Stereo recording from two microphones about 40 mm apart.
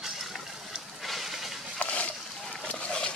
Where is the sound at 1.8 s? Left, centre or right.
Left.